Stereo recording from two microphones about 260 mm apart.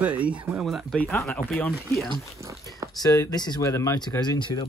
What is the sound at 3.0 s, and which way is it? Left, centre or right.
Speech, centre.